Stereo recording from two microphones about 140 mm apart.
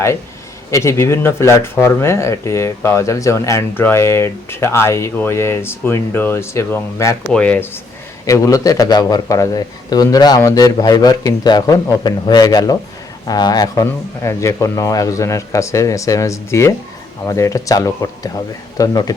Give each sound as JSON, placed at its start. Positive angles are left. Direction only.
{"t": 0.7, "sound": "speech", "side_deg": 20}
{"t": 8.3, "sound": "speech", "side_deg": 25}